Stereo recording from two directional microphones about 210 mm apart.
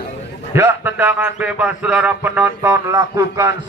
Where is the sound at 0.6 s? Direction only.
10° right (ahead or behind).